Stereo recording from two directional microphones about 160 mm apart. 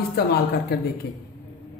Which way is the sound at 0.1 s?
75° left (ahead or behind).